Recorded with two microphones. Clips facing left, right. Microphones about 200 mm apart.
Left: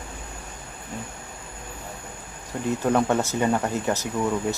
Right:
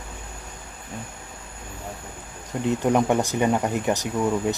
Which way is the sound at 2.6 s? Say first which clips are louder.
Right 1 dB; 15° right (ahead or behind).